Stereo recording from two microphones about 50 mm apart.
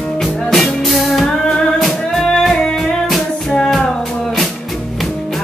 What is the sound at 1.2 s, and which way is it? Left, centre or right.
Music, centre.